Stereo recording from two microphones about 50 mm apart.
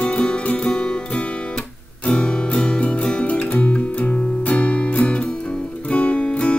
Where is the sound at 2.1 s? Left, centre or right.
Centre.